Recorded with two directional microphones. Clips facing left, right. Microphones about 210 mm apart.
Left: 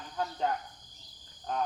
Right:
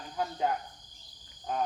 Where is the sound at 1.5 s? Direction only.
5° right (ahead or behind).